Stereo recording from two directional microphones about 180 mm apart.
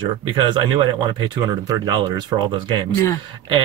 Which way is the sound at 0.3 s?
25° right (ahead or behind).